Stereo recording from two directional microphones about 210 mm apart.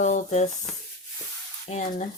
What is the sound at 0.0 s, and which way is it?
Speech, 35° left (ahead or behind).